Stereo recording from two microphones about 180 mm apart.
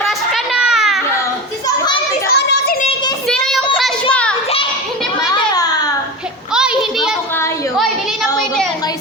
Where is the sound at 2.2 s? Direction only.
60° left (ahead or behind).